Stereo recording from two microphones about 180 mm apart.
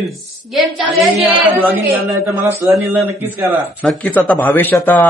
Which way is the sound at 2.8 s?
15° right (ahead or behind).